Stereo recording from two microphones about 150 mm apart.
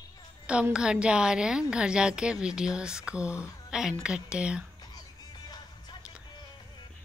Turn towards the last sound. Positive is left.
turn(degrees=30)  # may be behind; listen again after turning